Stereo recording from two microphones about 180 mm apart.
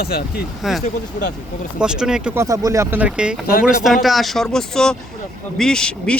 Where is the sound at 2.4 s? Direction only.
20° right (ahead or behind); by 6.1 s 5° left (ahead or behind).